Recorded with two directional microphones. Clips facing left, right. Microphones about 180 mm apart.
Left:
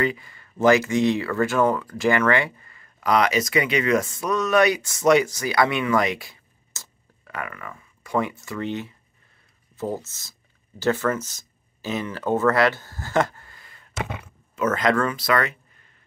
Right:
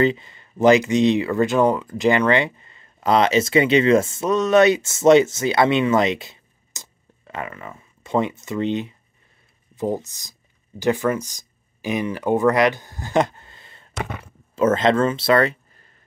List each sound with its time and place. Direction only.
0.0 s speech: 25° right (ahead or behind)